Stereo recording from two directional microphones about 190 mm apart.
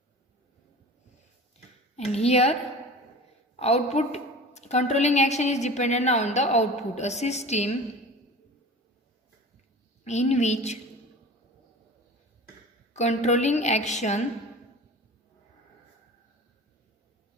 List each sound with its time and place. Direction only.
2.1 s a woman's voice: 35° left (ahead or behind)
3.6 s a woman's voice: 35° left (ahead or behind)
10.0 s a woman's voice: 35° left (ahead or behind)
12.9 s a woman's voice: 35° left (ahead or behind)